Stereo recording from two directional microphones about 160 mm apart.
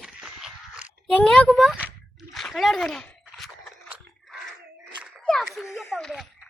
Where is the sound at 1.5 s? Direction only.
Centre (ahead or behind).